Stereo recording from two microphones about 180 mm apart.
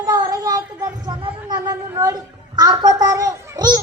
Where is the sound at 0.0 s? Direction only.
20° right (ahead or behind).